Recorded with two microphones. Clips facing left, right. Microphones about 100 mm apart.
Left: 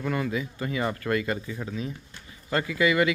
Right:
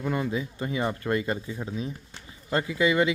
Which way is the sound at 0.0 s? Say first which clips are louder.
Even; 20° right (ahead or behind).